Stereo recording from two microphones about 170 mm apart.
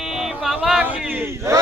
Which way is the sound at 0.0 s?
Centre (ahead or behind).